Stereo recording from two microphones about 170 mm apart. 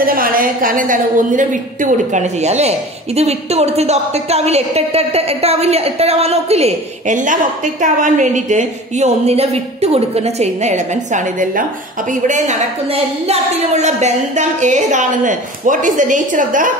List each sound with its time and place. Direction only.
0.0 s a woman's voice: 55° right (ahead or behind)